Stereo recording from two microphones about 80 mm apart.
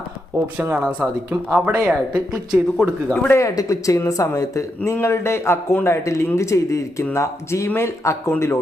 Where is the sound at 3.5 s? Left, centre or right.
Left.